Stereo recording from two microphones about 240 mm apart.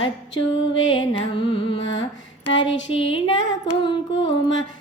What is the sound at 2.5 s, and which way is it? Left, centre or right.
Music, left.